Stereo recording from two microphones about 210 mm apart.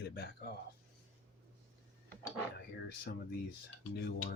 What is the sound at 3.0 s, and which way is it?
Speech, 50° left (ahead or behind).